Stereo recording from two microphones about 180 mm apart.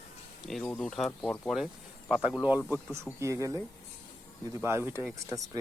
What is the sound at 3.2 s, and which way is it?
Speech, 15° right (ahead or behind).